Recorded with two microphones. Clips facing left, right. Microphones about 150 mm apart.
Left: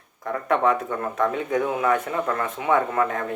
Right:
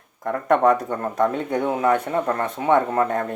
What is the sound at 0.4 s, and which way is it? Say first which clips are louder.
Speech: right 4 dB; 45° right (ahead or behind).